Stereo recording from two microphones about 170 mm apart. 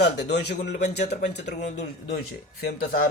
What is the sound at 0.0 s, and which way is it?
Speech, 85° left.